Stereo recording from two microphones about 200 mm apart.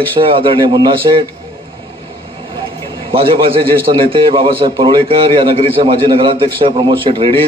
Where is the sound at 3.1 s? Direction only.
25° right (ahead or behind).